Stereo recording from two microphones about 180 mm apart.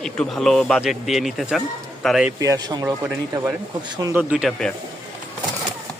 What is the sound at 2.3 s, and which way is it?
Speech, 20° right (ahead or behind).